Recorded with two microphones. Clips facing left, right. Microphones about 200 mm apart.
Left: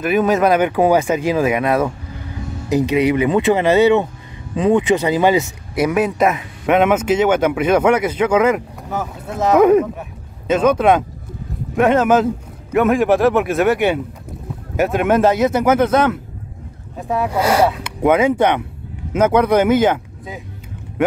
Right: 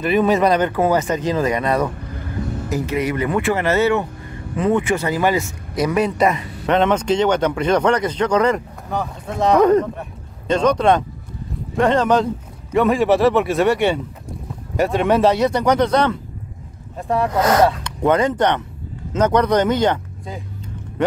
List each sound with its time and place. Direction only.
0.0 s speech: centre (ahead or behind)
2.7 s speech: 15° left (ahead or behind)